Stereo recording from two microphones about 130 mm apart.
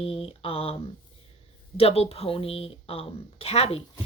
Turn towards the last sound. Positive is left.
turn(degrees=50)  # may be behind; listen again after turning